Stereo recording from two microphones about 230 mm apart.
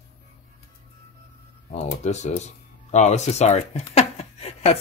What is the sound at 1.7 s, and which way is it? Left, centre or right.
Speech, left.